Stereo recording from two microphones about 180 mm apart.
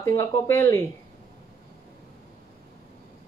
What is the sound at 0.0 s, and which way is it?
Speech, 15° left (ahead or behind).